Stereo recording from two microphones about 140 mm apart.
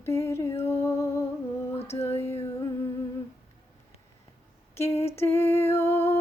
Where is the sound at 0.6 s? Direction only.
20° left (ahead or behind).